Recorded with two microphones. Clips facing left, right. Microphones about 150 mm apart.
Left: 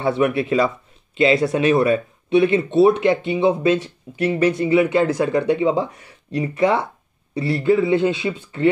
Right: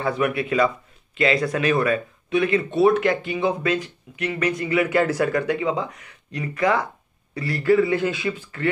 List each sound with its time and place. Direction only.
0.0 s speech: 30° left (ahead or behind)